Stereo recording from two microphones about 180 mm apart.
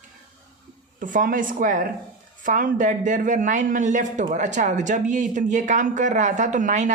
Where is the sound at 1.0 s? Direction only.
50° right (ahead or behind).